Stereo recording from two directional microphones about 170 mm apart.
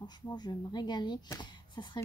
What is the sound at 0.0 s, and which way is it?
Speech, 25° left (ahead or behind).